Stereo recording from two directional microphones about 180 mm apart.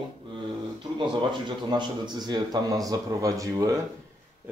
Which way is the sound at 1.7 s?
25° right (ahead or behind).